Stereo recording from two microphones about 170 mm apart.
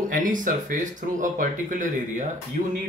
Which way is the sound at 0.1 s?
50° right (ahead or behind).